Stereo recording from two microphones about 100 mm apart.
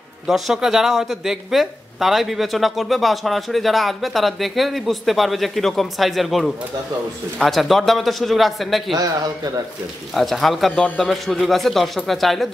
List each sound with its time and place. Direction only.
0.3 s speech: 5° right (ahead or behind)
8.9 s a man's voice: 40° right (ahead or behind)
10.1 s speech: centre (ahead or behind)